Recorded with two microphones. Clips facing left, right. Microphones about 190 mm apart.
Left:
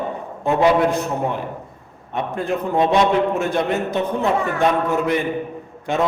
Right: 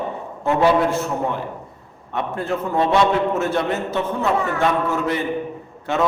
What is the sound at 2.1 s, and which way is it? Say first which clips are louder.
A man's voice: left 1 dB; 15° left (ahead or behind).